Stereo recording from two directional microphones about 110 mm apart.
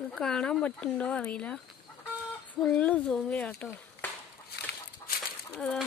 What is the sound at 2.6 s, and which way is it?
Speech, 10° left (ahead or behind).